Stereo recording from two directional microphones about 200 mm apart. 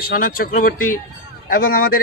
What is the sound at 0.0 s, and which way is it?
A man's voice, 45° left (ahead or behind).